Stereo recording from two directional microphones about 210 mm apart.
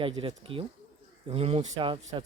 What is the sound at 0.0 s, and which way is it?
Speech, 25° right (ahead or behind).